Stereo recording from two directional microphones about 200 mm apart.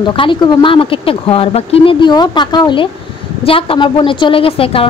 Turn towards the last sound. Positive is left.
turn(degrees=25)  # may be behind; listen again after turning